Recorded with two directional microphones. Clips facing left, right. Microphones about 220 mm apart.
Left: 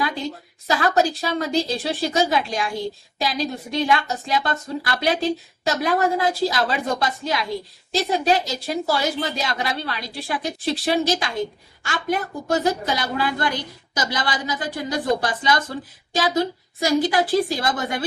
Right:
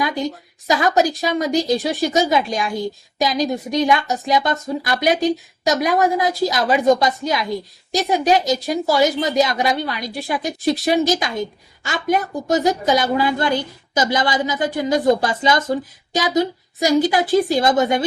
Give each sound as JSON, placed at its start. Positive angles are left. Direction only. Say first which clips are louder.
{"t": 0.7, "sound": "a woman's voice", "louder": "right 3 dB", "side_deg": -20}